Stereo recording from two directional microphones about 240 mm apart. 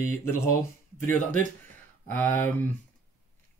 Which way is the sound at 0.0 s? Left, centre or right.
Centre.